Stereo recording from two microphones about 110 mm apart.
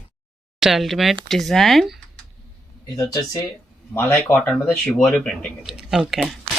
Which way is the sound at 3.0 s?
35° left (ahead or behind).